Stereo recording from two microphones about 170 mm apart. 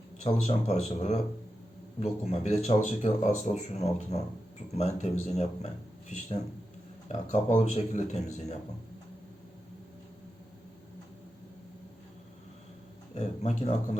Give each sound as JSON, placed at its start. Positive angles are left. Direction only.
{"t": 0.2, "sound": "speech", "side_deg": 40}
{"t": 13.1, "sound": "speech", "side_deg": 40}